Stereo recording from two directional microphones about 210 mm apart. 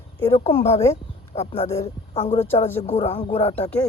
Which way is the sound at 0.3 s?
30° left (ahead or behind).